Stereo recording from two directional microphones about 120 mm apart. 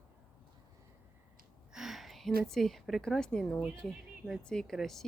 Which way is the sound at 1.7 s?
5° right (ahead or behind).